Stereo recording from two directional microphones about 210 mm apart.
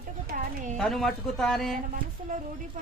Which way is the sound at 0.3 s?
35° right (ahead or behind).